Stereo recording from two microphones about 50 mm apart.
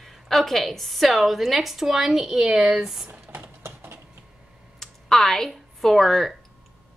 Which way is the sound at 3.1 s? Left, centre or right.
Right.